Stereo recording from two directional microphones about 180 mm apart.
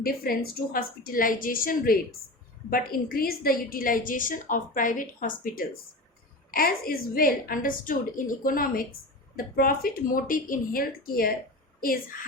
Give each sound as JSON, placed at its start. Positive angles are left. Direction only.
{"t": 0.0, "sound": "a woman's voice", "side_deg": 55}